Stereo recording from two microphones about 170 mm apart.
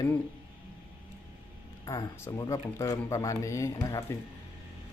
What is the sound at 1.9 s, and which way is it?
Speech, 20° left (ahead or behind).